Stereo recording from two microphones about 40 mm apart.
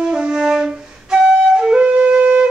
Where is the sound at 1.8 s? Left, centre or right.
Right.